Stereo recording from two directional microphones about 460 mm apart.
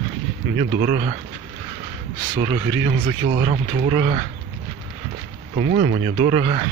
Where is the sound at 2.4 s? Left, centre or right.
Centre.